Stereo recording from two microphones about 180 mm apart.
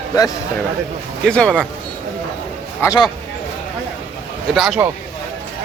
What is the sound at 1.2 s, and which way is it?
Speech, 5° left (ahead or behind).